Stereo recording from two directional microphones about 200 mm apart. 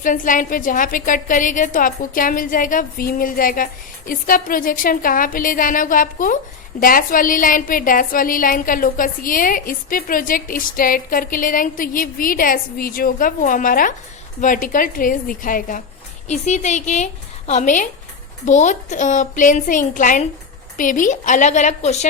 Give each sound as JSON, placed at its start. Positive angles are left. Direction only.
{"t": 0.0, "sound": "a woman's voice", "side_deg": 40}